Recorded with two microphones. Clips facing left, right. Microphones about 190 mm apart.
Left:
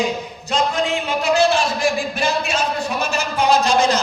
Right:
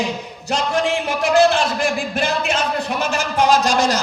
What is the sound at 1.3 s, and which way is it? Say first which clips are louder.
Speech: right 3 dB; 55° right (ahead or behind).